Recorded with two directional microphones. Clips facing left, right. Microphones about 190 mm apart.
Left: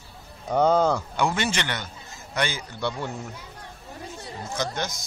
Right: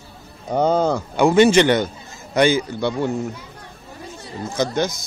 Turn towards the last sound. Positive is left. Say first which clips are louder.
# right 8 dB
turn(degrees=-10)  # may be behind; listen again after turning